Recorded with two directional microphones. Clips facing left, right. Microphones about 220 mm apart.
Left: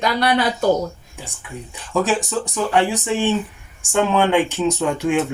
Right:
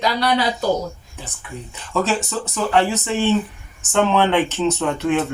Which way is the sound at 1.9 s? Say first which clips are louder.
Left 2 dB; 15° left (ahead or behind).